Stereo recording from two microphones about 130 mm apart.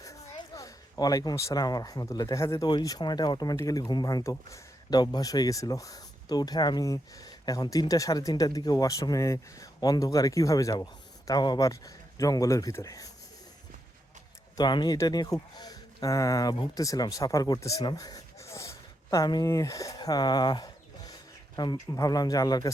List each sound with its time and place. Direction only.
0.0 s speech: 25° left (ahead or behind)
2.6 s speech: 30° left (ahead or behind)
14.5 s speech: 35° left (ahead or behind)